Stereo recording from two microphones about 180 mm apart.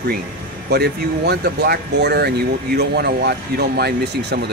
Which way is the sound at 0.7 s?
65° right (ahead or behind).